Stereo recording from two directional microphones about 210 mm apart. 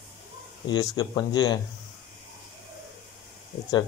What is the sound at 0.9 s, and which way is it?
Speech, 20° left (ahead or behind).